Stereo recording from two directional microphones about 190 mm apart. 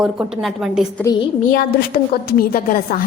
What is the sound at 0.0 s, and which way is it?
A woman's voice, 5° right (ahead or behind).